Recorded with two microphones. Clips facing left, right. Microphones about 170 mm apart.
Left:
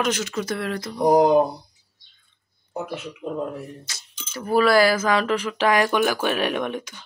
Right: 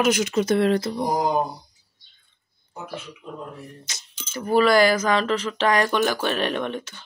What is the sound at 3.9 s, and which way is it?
Speech, 20° right (ahead or behind).